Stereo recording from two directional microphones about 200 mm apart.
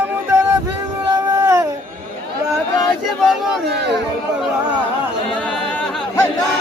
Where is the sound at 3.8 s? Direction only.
55° right (ahead or behind).